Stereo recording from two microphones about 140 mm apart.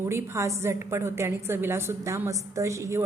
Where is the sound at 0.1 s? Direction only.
20° right (ahead or behind).